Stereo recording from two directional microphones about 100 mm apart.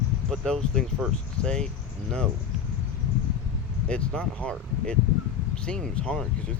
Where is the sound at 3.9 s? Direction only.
10° left (ahead or behind).